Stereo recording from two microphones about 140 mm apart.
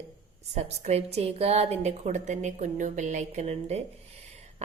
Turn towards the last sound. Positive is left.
turn(degrees=-50)  # may be behind; listen again after turning